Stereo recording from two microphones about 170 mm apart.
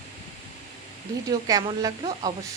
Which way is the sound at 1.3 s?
20° right (ahead or behind).